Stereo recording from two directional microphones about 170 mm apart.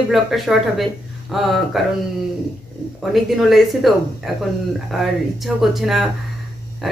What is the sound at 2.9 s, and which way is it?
Speech, centre (ahead or behind).